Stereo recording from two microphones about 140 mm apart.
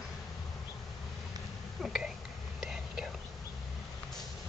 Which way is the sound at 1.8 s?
5° right (ahead or behind).